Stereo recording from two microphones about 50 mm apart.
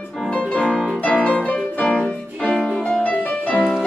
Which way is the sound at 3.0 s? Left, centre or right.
Left.